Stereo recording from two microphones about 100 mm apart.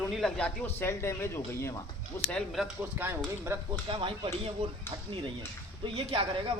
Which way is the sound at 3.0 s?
25° right (ahead or behind).